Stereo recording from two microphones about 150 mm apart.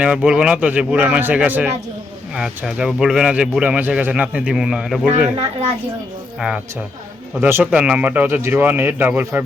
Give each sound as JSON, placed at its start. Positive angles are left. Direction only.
{"t": 0.0, "sound": "a man's voice", "side_deg": -5}
{"t": 7.3, "sound": "a man's voice", "side_deg": -15}